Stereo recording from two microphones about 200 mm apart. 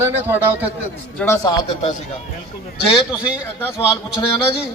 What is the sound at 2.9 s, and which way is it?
Speech, 5° right (ahead or behind).